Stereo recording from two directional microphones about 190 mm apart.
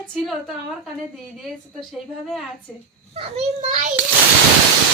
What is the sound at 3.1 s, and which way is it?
Speech, 30° right (ahead or behind).